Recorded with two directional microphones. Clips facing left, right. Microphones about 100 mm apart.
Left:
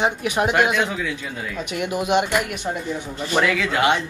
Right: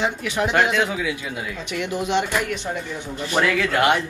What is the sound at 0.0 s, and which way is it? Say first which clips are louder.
Speech: left 2 dB; 20° left (ahead or behind).